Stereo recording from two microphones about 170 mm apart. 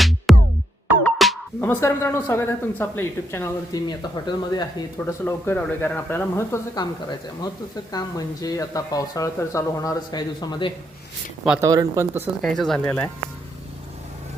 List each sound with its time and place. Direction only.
0.3 s music: centre (ahead or behind)
1.6 s speech: 10° left (ahead or behind)
4.9 s speech: 15° left (ahead or behind)
11.6 s speech: 20° right (ahead or behind)
12.4 s speech: centre (ahead or behind)